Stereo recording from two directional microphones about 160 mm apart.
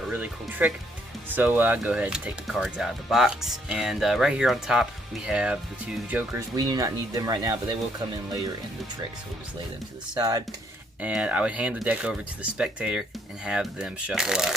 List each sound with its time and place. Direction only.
0.1 s speech: 10° right (ahead or behind)
6.6 s speech: 20° right (ahead or behind)
10.2 s speech: 25° right (ahead or behind)
11.0 s speech: 10° right (ahead or behind)